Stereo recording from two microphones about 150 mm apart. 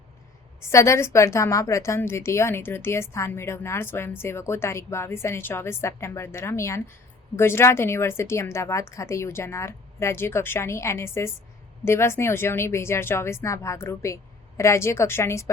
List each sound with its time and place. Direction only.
0.7 s a woman's voice: 20° left (ahead or behind)